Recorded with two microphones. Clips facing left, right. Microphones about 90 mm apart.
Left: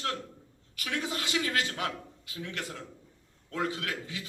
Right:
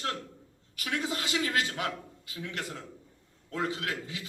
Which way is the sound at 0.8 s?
35° right (ahead or behind).